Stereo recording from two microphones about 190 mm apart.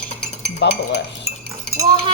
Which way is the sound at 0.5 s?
65° left (ahead or behind).